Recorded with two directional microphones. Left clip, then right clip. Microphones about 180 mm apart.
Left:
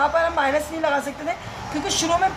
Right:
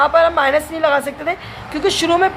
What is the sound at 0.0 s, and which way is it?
A woman's voice, 45° right (ahead or behind).